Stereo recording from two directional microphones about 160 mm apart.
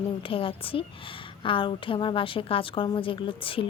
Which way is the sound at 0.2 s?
35° left (ahead or behind).